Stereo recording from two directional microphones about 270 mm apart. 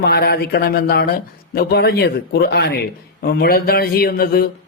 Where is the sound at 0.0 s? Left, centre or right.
Left.